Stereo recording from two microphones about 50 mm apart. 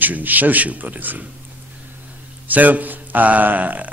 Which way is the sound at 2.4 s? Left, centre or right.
Right.